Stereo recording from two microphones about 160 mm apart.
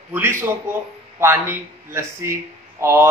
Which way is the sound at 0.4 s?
15° right (ahead or behind).